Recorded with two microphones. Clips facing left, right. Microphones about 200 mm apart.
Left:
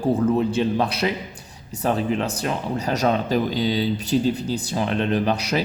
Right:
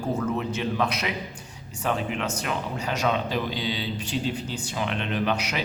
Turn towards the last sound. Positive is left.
turn(degrees=35)  # may be behind; listen again after turning